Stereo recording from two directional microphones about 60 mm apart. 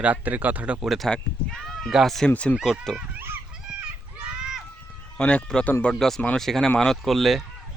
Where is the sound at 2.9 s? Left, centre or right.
Centre.